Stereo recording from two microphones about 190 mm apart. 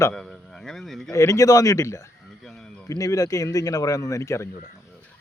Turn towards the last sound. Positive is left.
turn(degrees=15)  # may be behind; listen again after turning